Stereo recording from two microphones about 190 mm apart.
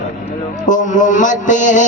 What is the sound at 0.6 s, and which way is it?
A man's voice, 40° left (ahead or behind).